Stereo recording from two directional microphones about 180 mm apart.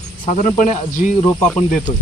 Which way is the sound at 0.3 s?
45° left (ahead or behind).